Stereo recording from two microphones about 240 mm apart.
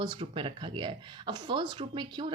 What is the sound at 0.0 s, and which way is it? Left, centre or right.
Speech, right.